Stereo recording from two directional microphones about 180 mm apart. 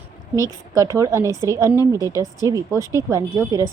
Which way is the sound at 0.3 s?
15° right (ahead or behind).